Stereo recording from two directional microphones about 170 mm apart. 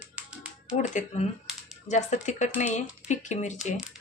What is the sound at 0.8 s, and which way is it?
Speech, 40° left (ahead or behind).